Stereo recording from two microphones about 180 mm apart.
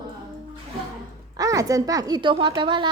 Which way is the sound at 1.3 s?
20° right (ahead or behind).